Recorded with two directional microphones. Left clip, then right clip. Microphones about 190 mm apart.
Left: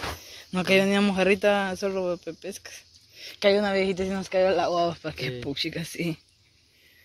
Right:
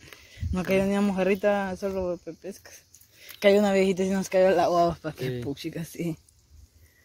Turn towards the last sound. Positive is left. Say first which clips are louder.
# left 2 dB
turn(degrees=0)  # may be behind; listen again after turning